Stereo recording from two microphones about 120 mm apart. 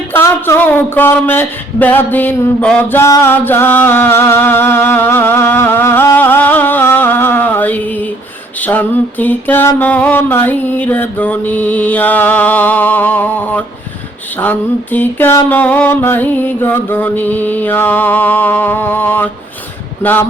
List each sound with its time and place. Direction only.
0.1 s mantra: 20° left (ahead or behind)
3.0 s music: 25° left (ahead or behind)
8.6 s mantra: 15° left (ahead or behind)